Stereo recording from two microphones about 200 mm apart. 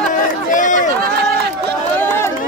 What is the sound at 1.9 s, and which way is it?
Run, 10° left (ahead or behind).